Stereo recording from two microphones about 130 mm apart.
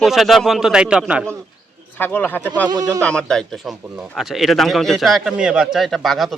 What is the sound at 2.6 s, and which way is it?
Speech, 30° right (ahead or behind).